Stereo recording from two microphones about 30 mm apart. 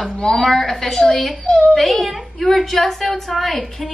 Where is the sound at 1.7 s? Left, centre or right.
Centre.